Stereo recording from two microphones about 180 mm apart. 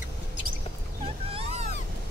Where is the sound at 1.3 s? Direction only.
35° right (ahead or behind).